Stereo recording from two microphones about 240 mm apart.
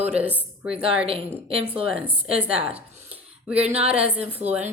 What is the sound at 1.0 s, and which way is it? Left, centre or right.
Speech, right.